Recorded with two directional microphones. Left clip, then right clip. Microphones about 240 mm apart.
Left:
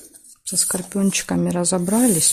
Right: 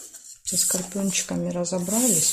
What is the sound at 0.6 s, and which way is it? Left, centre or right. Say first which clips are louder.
Speech: left 4 dB; left.